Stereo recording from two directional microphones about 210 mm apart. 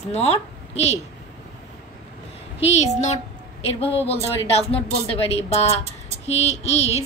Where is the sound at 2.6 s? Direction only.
30° left (ahead or behind).